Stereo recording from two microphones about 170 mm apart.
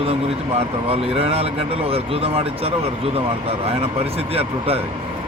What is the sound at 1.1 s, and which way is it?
Speech, 35° right (ahead or behind).